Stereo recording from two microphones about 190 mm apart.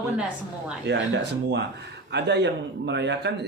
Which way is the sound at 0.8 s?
65° right (ahead or behind).